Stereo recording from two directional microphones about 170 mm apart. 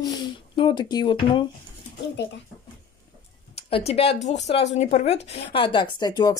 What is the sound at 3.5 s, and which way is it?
A woman's voice, 35° left (ahead or behind).